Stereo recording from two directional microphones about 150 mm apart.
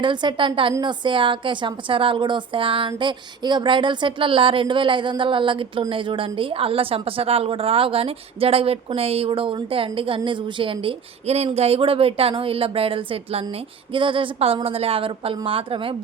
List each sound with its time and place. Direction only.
0.0 s speech: 30° right (ahead or behind)